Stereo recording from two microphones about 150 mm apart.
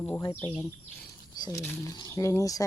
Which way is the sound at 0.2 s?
15° left (ahead or behind).